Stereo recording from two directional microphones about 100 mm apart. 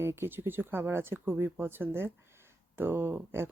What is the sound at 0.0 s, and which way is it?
Speech, 25° right (ahead or behind).